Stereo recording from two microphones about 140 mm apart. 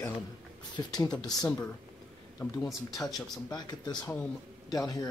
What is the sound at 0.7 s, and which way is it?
Speech, 30° left (ahead or behind).